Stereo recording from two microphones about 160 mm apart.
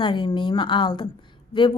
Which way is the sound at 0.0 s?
30° left (ahead or behind).